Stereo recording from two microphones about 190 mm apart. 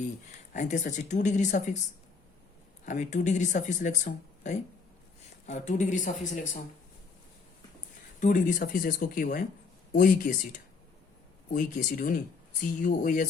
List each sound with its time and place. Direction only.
0.3 s speech: 40° left (ahead or behind)
2.8 s speech: 40° left (ahead or behind)
8.2 s speech: 45° left (ahead or behind)